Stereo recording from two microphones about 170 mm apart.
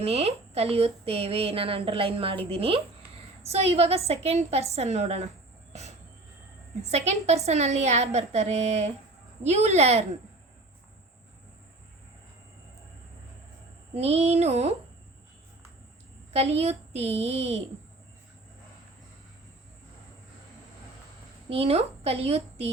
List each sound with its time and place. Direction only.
0.0 s speech: 35° right (ahead or behind)
6.9 s speech: 40° right (ahead or behind)
13.9 s speech: 40° right (ahead or behind)
16.3 s speech: 35° right (ahead or behind)
21.5 s speech: 35° right (ahead or behind)